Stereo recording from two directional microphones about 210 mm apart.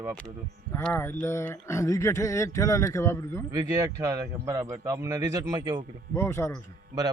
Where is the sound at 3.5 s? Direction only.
15° right (ahead or behind).